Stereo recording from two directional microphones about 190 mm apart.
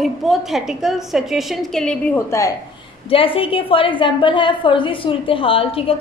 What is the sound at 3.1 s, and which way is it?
A woman's voice, 30° left (ahead or behind).